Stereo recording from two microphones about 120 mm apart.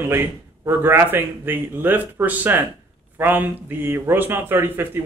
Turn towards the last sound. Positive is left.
turn(degrees=-20)  # may be behind; listen again after turning